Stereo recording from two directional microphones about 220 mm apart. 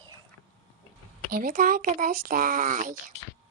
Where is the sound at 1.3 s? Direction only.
40° right (ahead or behind).